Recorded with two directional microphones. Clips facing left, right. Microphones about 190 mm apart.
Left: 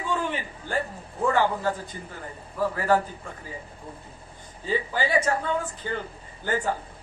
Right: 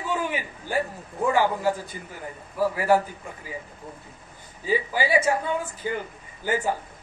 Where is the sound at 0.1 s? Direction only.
10° right (ahead or behind).